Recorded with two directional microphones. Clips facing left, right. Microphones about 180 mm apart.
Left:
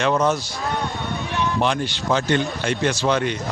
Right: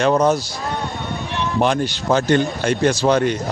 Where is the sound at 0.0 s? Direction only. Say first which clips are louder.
Right 4 dB; 40° right (ahead or behind).